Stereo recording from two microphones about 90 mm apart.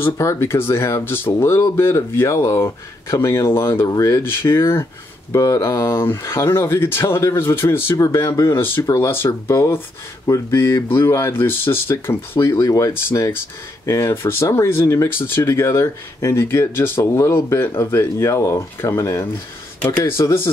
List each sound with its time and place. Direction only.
0.0 s speech: 30° left (ahead or behind)
3.8 s speech: 40° left (ahead or behind)
4.2 s speech: 30° left (ahead or behind)